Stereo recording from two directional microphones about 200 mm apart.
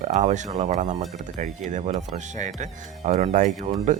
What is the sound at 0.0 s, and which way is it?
Speech, 35° right (ahead or behind).